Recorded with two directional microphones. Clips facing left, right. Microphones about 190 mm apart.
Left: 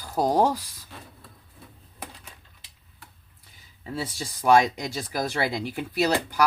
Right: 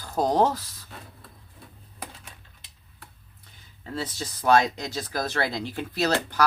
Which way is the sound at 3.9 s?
10° left (ahead or behind).